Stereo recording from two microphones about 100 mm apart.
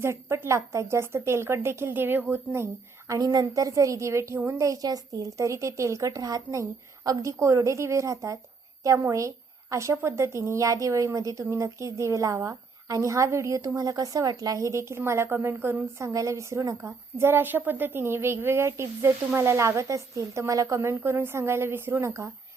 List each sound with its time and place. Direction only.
0.0 s a woman's voice: 25° right (ahead or behind)
3.1 s a woman's voice: 35° right (ahead or behind)